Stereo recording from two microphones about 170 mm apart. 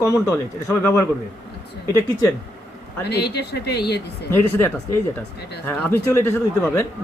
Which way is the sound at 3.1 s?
75° left (ahead or behind).